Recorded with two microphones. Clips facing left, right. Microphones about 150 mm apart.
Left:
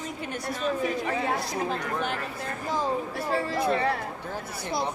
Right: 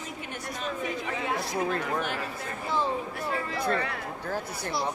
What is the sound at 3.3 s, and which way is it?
Speech, 30° left (ahead or behind).